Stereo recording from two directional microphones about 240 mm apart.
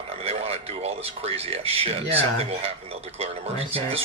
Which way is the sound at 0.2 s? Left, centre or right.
Right.